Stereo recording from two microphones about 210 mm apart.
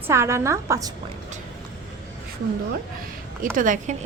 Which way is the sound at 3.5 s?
40° right (ahead or behind).